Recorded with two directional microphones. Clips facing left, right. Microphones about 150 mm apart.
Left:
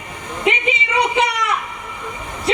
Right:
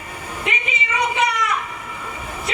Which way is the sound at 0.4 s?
30° left (ahead or behind).